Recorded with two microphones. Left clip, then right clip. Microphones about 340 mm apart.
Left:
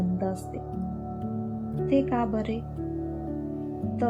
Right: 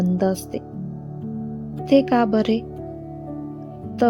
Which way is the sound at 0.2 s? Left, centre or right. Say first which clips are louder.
Right 9 dB; centre.